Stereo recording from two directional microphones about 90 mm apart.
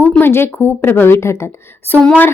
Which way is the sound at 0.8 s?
25° left (ahead or behind).